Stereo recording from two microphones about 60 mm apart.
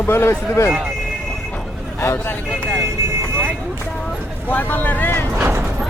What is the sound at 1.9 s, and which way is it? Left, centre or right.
Speech, left.